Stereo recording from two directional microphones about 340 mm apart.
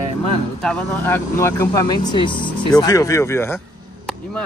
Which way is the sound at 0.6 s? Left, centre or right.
Centre.